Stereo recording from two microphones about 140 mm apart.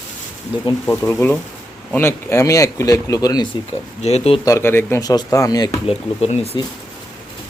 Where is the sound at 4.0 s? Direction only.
50° left (ahead or behind).